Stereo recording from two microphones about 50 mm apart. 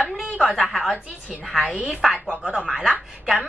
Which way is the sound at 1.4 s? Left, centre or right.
Centre.